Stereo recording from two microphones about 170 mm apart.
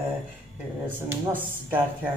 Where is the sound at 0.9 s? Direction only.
10° right (ahead or behind).